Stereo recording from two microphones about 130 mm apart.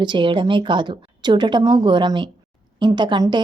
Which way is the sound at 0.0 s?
40° right (ahead or behind).